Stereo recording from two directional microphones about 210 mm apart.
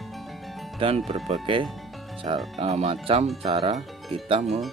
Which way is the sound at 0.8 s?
25° right (ahead or behind).